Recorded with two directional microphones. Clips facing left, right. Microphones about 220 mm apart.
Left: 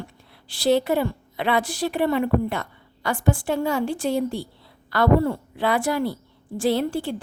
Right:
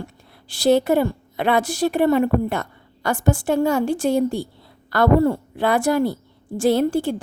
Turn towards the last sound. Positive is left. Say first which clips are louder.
# right 4 dB
turn(degrees=-45)  # may be behind; listen again after turning